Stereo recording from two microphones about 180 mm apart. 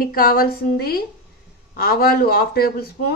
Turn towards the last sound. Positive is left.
turn(degrees=60)  # may be behind; listen again after turning